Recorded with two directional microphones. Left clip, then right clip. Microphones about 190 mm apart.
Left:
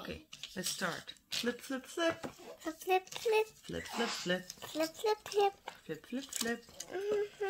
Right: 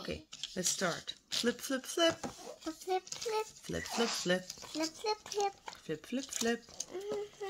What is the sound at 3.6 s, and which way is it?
Speech, 30° right (ahead or behind).